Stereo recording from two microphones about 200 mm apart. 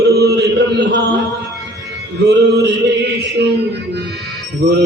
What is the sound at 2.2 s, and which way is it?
Male singing, 55° right (ahead or behind).